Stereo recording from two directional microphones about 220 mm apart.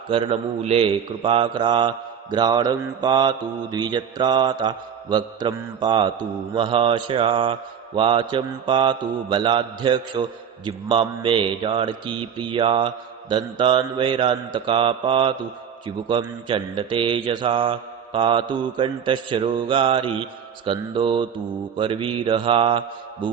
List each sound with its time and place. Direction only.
0.1 s mantra: 25° right (ahead or behind)